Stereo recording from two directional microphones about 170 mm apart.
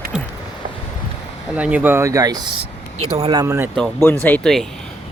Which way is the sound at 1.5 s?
5° right (ahead or behind).